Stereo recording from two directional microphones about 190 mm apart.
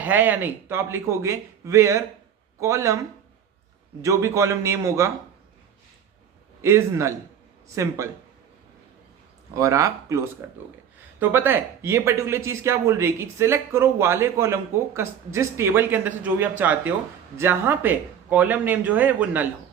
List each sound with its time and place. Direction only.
0.0 s speech: 10° right (ahead or behind)
4.0 s speech: 15° right (ahead or behind)
6.6 s speech: 15° right (ahead or behind)
9.6 s speech: 15° right (ahead or behind)